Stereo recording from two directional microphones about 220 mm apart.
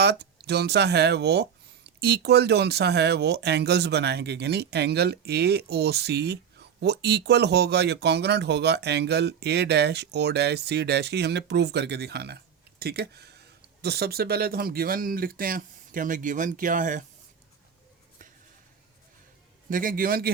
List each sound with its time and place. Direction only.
0.0 s speech: 50° right (ahead or behind)
19.7 s speech: 40° right (ahead or behind)